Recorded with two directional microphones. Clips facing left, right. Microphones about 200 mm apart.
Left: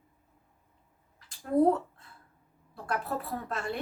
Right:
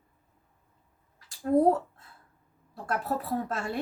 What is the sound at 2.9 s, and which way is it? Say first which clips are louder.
Speech: right 3 dB; 45° right (ahead or behind).